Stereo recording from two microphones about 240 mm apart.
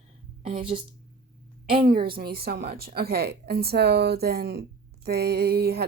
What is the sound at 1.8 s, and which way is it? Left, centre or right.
Speech, right.